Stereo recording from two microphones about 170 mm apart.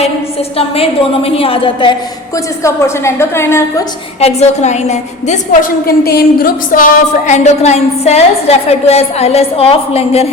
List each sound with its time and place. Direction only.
0.5 s a woman's voice: 35° left (ahead or behind)
2.6 s a woman's voice: 15° left (ahead or behind)
4.2 s a woman's voice: 40° left (ahead or behind)
5.8 s a woman's voice: 60° left (ahead or behind); by 10.2 s 35° left (ahead or behind)